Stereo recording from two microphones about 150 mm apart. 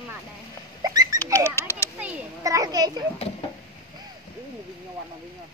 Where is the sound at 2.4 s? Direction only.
25° right (ahead or behind).